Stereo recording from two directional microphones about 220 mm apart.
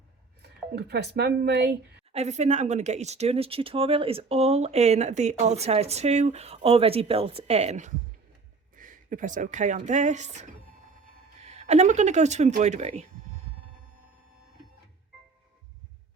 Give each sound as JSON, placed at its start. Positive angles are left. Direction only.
{"t": 0.4, "sound": "speech", "side_deg": -50}
{"t": 2.1, "sound": "speech", "side_deg": -30}